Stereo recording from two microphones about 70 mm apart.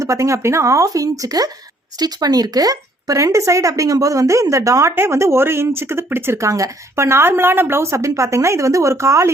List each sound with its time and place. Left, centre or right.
0.0 s speech: right
2.0 s speech: right
4.9 s speech: right